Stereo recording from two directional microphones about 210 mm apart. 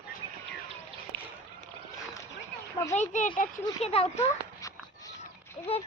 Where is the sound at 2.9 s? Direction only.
35° left (ahead or behind).